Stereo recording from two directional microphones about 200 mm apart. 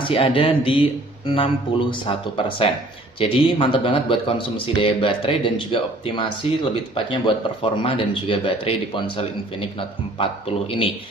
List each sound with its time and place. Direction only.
0.0 s speech: 25° left (ahead or behind)